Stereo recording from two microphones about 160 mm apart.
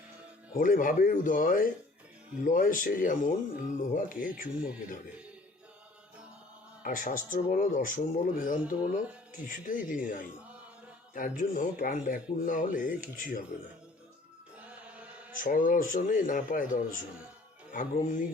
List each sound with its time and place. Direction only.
0.5 s speech: 60° left (ahead or behind)
6.8 s speech: 55° left (ahead or behind)
14.7 s mantra: 10° right (ahead or behind)
15.4 s speech: 55° left (ahead or behind)